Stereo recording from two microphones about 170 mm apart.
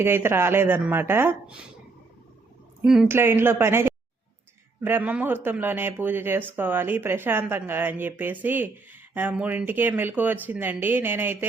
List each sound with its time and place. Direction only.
0.0 s speech: 15° right (ahead or behind)
2.8 s speech: 5° right (ahead or behind)
3.2 s speech: 15° right (ahead or behind)